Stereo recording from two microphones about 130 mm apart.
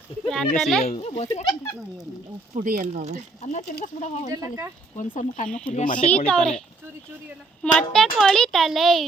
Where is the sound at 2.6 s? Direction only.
75° right (ahead or behind).